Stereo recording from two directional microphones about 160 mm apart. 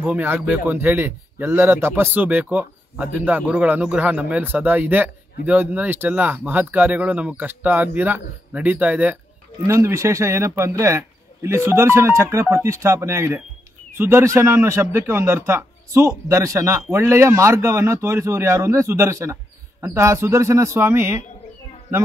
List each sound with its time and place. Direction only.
0.0 s speech: 10° right (ahead or behind)